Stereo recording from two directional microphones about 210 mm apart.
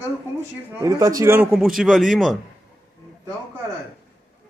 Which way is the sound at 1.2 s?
10° right (ahead or behind).